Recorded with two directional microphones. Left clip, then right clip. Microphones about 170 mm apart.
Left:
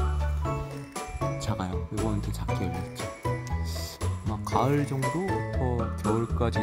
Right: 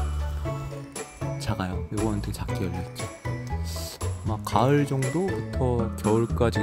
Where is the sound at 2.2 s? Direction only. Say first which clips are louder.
Even; 20° right (ahead or behind).